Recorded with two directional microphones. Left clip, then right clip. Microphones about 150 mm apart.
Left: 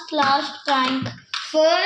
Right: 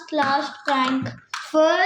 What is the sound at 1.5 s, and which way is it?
Speech, 45° right (ahead or behind).